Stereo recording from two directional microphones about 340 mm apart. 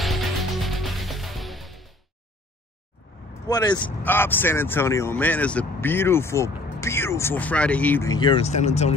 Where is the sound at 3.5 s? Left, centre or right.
Centre.